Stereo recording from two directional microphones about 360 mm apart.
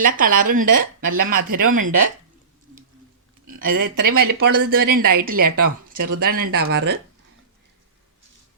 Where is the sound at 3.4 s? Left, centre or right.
Right.